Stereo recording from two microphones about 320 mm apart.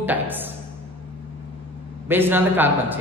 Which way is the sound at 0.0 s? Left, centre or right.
Centre.